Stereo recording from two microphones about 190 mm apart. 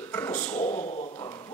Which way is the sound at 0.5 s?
40° left (ahead or behind).